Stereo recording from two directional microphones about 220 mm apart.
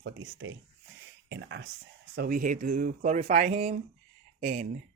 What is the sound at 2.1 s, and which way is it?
Speech, 40° right (ahead or behind).